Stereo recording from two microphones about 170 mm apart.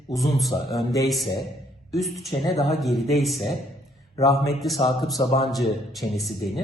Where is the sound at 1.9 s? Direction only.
Centre (ahead or behind).